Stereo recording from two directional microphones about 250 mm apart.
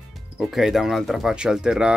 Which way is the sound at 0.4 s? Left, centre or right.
Centre.